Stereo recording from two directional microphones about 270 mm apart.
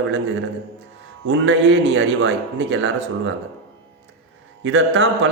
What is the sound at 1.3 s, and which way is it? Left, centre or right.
A man's voice, right.